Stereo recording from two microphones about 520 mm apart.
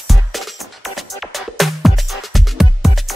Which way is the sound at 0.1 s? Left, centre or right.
Centre.